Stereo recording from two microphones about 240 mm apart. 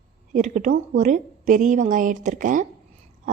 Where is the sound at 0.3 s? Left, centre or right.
Right.